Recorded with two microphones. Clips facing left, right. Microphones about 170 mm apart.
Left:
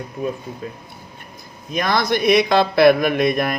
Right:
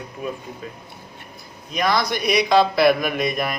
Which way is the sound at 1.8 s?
50° left (ahead or behind).